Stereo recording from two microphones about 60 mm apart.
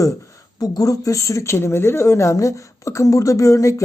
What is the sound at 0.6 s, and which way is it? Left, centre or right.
Speech, left.